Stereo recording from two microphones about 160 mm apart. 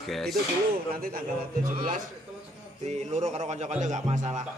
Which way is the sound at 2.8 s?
45° right (ahead or behind).